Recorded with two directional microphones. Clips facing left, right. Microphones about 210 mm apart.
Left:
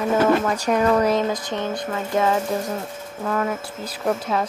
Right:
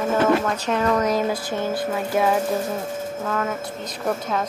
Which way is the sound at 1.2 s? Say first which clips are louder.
Even; 5° right (ahead or behind).